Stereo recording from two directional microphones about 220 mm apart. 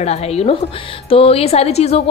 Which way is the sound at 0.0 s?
30° left (ahead or behind).